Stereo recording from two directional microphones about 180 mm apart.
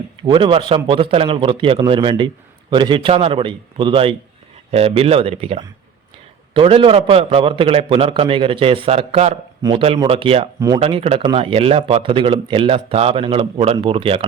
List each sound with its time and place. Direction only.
0.2 s a man's voice: 25° right (ahead or behind)